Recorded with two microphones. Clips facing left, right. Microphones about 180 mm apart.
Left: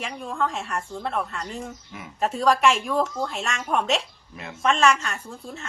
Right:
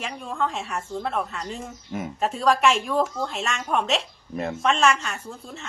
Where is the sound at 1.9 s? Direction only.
45° right (ahead or behind).